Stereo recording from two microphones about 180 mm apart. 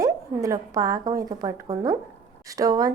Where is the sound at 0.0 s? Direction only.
20° right (ahead or behind).